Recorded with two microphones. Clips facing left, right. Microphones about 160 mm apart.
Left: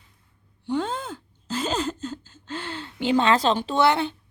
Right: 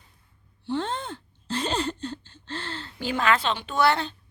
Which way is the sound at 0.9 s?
5° left (ahead or behind).